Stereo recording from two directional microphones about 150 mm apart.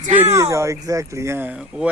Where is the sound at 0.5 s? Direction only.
20° right (ahead or behind).